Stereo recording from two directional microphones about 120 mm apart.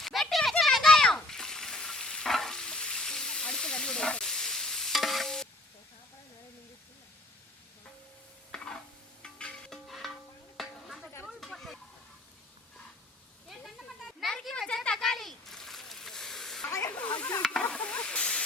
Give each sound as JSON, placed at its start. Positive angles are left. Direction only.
{"t": 0.0, "sound": "a sound", "side_deg": 0}
{"t": 0.6, "sound": "frying", "side_deg": 0}
{"t": 8.5, "sound": "stir", "side_deg": 5}
{"t": 9.2, "sound": "music", "side_deg": 5}
{"t": 10.6, "sound": "a sound", "side_deg": 0}
{"t": 13.5, "sound": "a sound", "side_deg": 0}
{"t": 16.6, "sound": "snake", "side_deg": 20}
{"t": 16.9, "sound": "snake", "side_deg": 10}
{"t": 17.4, "sound": "stir", "side_deg": 5}